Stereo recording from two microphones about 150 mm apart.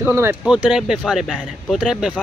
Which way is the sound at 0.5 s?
5° right (ahead or behind).